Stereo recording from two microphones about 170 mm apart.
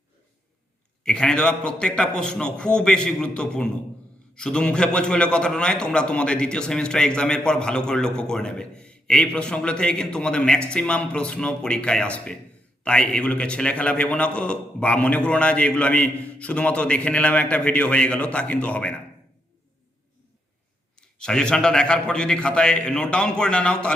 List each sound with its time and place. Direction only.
1.0 s a man's voice: 5° left (ahead or behind)
21.0 s a man's voice: 5° left (ahead or behind)